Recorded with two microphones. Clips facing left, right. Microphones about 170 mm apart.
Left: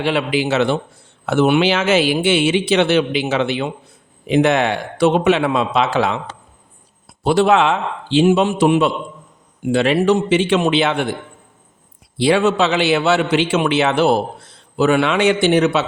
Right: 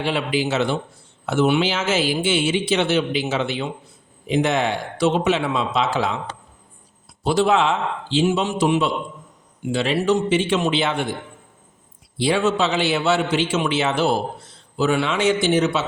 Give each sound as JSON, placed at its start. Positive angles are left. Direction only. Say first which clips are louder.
{"t": 0.0, "sound": "a man's voice", "louder": "left 4 dB", "side_deg": 70}
{"t": 7.3, "sound": "a man's voice", "louder": "left 4 dB", "side_deg": 65}
{"t": 12.1, "sound": "a man's voice", "louder": "left 5 dB", "side_deg": 75}